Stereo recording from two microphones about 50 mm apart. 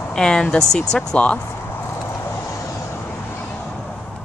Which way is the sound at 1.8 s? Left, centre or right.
Left.